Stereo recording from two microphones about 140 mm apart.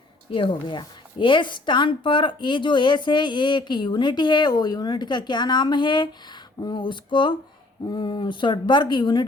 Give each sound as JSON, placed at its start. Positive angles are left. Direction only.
{"t": 0.3, "sound": "a woman's voice", "side_deg": 35}